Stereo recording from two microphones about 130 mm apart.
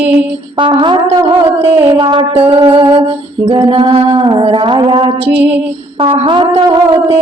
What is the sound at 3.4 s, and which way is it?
Music, 45° right (ahead or behind).